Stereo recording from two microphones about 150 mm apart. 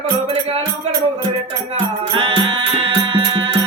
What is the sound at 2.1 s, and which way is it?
Music, 35° right (ahead or behind).